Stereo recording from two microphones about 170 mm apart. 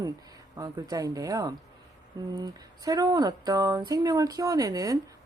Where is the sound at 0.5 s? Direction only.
20° right (ahead or behind).